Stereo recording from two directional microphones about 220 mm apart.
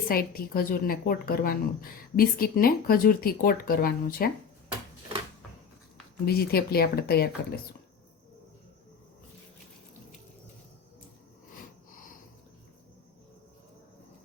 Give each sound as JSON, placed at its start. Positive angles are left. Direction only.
{"t": 0.1, "sound": "a woman's voice", "side_deg": 40}
{"t": 6.2, "sound": "speech", "side_deg": 45}